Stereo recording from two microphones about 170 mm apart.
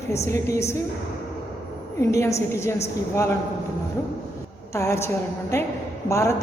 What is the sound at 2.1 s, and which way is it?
A woman's voice, 15° left (ahead or behind).